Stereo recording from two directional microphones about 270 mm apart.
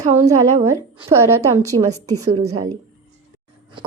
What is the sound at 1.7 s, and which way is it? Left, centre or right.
Speech, right.